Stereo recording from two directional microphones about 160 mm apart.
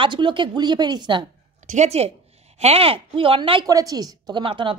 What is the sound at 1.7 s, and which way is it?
A woman's voice, 45° right (ahead or behind).